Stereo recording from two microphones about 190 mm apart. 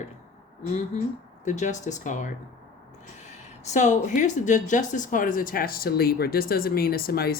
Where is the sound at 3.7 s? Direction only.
40° left (ahead or behind).